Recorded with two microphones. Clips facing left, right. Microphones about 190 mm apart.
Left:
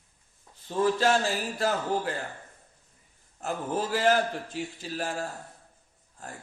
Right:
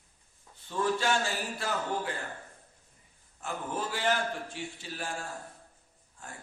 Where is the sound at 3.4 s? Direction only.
35° left (ahead or behind).